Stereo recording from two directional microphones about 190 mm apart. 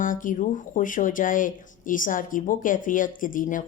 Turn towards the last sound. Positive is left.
turn(degrees=45)  # may be behind; listen again after turning